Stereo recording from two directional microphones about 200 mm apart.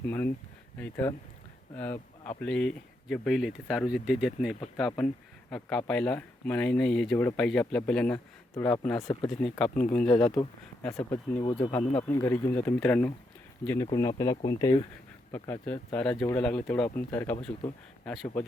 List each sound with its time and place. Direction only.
0.0 s speech: 10° left (ahead or behind)
9.0 s speech: 20° left (ahead or behind)
9.3 s speech: centre (ahead or behind)
11.4 s speech: 25° left (ahead or behind)
12.0 s speech: 10° left (ahead or behind)
13.8 s speech: 20° left (ahead or behind)
15.3 s speech: 10° left (ahead or behind)